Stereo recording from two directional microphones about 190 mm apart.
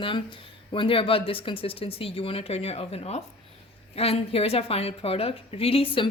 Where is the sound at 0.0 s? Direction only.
25° left (ahead or behind).